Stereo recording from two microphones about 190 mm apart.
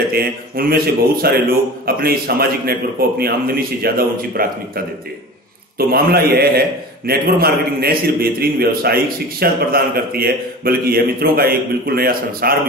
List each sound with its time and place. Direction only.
0.1 s a man's voice: 50° right (ahead or behind)